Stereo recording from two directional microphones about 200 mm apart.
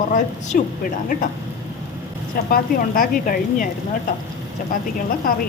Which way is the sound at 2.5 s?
45° left (ahead or behind).